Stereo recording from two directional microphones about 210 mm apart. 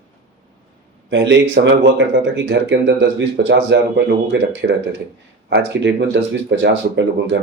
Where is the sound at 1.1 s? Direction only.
60° right (ahead or behind).